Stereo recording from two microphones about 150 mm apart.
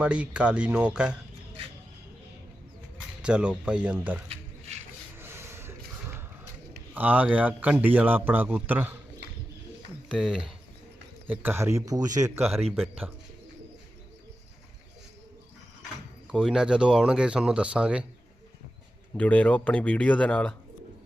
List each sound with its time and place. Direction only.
0.0 s a man's voice: 10° right (ahead or behind)
3.2 s a man's voice: 5° right (ahead or behind)
4.3 s a sound: 50° right (ahead or behind)
5.1 s a sound: 15° right (ahead or behind)
6.9 s a man's voice: 10° right (ahead or behind)
10.1 s speech: 5° right (ahead or behind)
11.3 s speech: 15° right (ahead or behind)
12.4 s speech: centre (ahead or behind)
16.2 s speech: 5° right (ahead or behind)
19.1 s speech: 10° left (ahead or behind)